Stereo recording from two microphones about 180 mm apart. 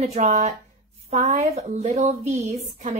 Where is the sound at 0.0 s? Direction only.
35° right (ahead or behind).